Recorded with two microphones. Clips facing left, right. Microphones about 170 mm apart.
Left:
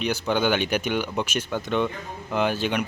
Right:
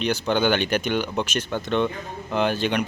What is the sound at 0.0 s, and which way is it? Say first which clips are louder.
Speech: right 2 dB; 5° left (ahead or behind).